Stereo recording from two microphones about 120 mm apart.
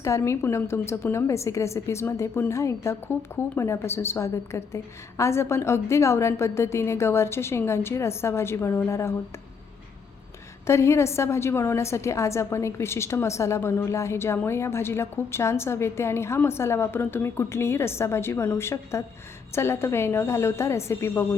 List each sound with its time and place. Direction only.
0.0 s a woman's voice: 25° left (ahead or behind)
10.7 s a woman's voice: 25° left (ahead or behind)